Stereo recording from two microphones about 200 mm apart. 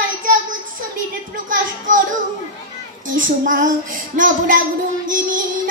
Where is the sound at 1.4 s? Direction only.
40° right (ahead or behind).